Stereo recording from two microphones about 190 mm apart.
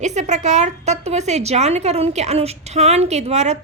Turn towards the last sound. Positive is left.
turn(degrees=-35)  # may be behind; listen again after turning